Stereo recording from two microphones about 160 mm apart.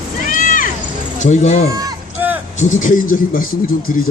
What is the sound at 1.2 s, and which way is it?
Speech, 50° left (ahead or behind).